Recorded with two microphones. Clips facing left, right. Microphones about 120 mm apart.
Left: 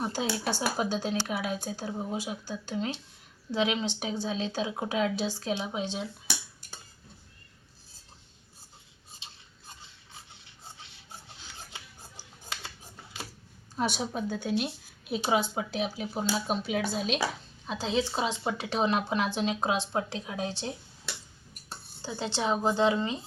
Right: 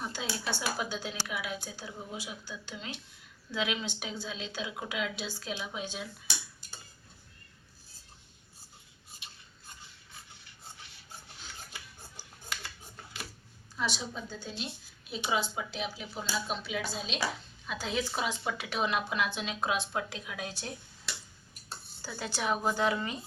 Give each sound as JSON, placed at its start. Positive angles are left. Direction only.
{"t": 0.0, "sound": "speech", "side_deg": 35}
{"t": 10.2, "sound": "a sound", "side_deg": 25}
{"t": 11.7, "sound": "scissors", "side_deg": 25}
{"t": 13.7, "sound": "a woman's voice", "side_deg": 55}
{"t": 15.2, "sound": "speech", "side_deg": 50}
{"t": 17.7, "sound": "speech", "side_deg": 30}
{"t": 22.0, "sound": "speech", "side_deg": 25}